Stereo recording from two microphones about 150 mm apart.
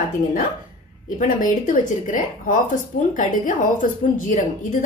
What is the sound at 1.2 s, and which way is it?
A woman's voice, 60° left (ahead or behind).